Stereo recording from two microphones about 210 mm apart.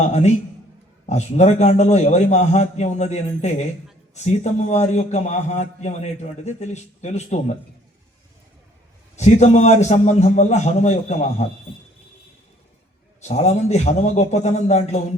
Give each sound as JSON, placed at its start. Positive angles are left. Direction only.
{"t": 0.0, "sound": "a man's voice", "side_deg": 35}
{"t": 9.1, "sound": "a man's voice", "side_deg": 35}
{"t": 13.2, "sound": "a man's voice", "side_deg": 30}